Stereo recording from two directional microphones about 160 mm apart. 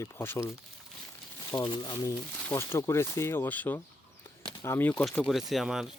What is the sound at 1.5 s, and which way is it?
Speech, 25° left (ahead or behind).